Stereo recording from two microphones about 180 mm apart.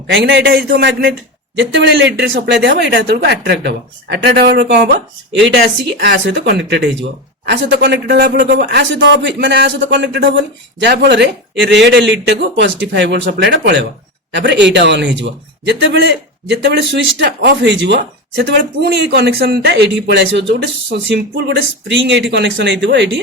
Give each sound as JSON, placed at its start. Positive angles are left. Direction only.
{"t": 0.1, "sound": "a man's voice", "side_deg": -75}
{"t": 1.5, "sound": "a man's voice", "side_deg": -75}